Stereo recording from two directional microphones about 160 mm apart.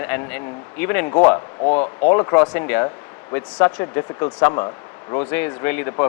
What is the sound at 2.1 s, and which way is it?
A man's voice, 20° left (ahead or behind).